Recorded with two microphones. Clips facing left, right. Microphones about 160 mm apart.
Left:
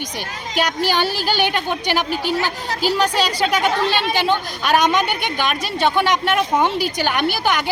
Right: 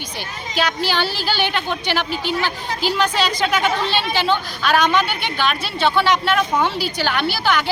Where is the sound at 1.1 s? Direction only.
45° left (ahead or behind).